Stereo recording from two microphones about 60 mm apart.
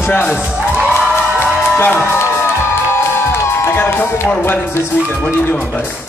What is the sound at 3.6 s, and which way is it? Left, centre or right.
Speech, left.